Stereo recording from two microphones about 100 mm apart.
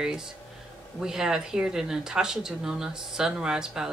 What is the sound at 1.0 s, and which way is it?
Speech, 5° right (ahead or behind).